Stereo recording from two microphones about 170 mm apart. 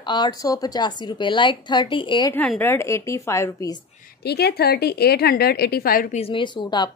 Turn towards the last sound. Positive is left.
turn(degrees=25)  # may be behind; listen again after turning